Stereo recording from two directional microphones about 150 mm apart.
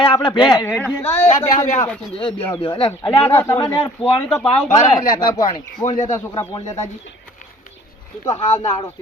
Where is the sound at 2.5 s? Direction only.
35° left (ahead or behind).